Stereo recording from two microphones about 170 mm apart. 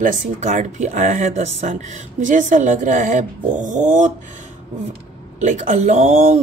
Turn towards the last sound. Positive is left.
turn(degrees=-40)  # may be behind; listen again after turning